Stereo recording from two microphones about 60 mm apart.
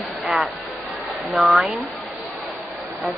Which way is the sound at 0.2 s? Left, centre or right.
Centre.